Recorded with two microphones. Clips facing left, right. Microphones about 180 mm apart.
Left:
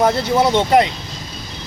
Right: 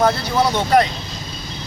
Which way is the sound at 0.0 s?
25° left (ahead or behind).